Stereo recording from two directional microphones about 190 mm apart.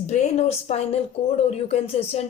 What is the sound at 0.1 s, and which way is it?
A woman's voice, 35° left (ahead or behind).